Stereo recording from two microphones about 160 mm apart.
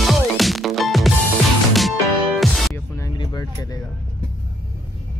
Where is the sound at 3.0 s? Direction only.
25° left (ahead or behind).